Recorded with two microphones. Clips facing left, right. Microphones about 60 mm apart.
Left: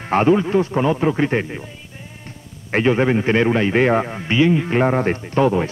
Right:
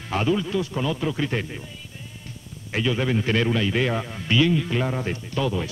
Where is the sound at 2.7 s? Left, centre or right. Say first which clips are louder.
Left 8 dB; left.